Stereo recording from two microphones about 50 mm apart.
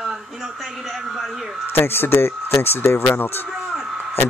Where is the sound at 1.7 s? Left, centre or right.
Left.